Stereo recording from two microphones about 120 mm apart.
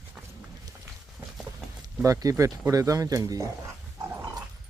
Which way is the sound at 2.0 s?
25° right (ahead or behind).